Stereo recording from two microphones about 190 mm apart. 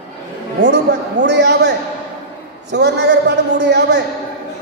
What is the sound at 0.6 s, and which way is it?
A man's voice, 65° right (ahead or behind).